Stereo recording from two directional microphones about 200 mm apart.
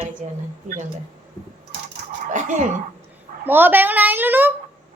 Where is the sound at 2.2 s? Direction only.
40° right (ahead or behind).